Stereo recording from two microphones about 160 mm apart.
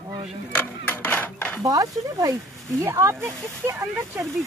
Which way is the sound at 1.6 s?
20° right (ahead or behind).